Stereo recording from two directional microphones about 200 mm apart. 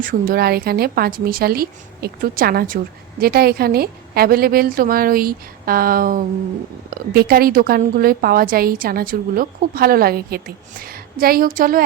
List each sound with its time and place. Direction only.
0.0 s a woman's voice: 45° right (ahead or behind)